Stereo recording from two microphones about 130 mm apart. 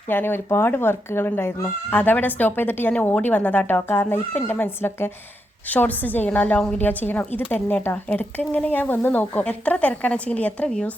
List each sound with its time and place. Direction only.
0.1 s a woman's voice: 15° left (ahead or behind)